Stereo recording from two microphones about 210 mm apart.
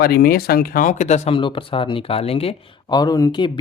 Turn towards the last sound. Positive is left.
turn(degrees=20)  # may be behind; listen again after turning